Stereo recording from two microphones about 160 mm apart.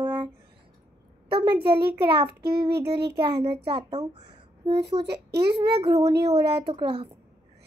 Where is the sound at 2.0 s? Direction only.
35° right (ahead or behind).